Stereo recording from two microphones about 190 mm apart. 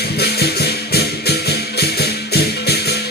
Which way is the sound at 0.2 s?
60° left (ahead or behind).